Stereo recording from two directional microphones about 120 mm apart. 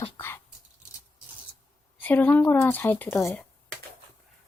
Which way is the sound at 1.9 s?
15° left (ahead or behind).